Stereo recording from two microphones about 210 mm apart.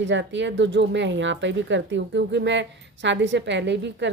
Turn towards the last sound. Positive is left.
turn(degrees=-55)  # may be behind; listen again after turning